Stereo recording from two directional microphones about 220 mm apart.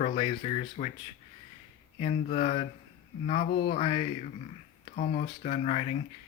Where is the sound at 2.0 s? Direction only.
30° left (ahead or behind).